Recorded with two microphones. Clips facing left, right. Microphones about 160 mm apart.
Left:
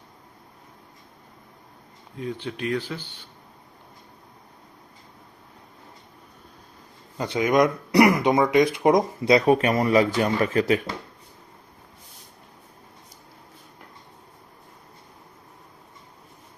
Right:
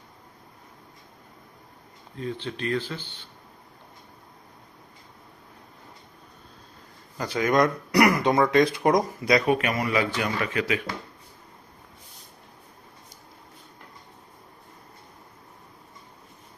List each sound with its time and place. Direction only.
2.1 s speech: 10° left (ahead or behind)
7.2 s speech: 20° left (ahead or behind)
9.5 s speech: 35° left (ahead or behind)